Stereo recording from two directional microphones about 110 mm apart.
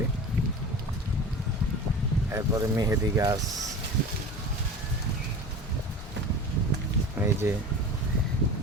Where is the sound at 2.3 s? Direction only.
30° right (ahead or behind).